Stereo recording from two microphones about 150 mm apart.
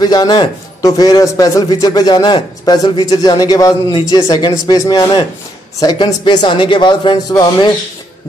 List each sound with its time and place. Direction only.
0.0 s a man's voice: 25° left (ahead or behind)